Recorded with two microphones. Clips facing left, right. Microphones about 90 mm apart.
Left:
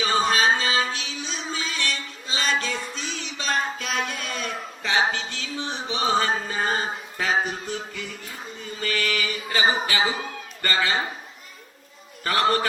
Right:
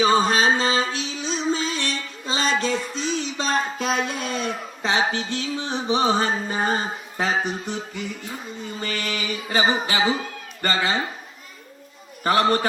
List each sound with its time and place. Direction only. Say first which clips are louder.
0.0 s music: right 3 dB; 30° right (ahead or behind)
10.6 s a man's voice: right 2 dB; 25° right (ahead or behind)
12.2 s a man's voice: right 3 dB; 25° right (ahead or behind)